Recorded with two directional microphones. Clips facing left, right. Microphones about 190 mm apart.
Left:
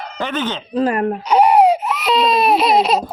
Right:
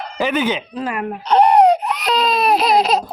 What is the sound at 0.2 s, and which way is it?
Speech, 10° right (ahead or behind).